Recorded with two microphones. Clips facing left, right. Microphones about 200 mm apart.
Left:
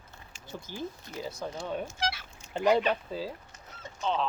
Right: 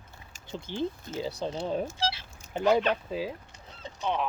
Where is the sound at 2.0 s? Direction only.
25° right (ahead or behind).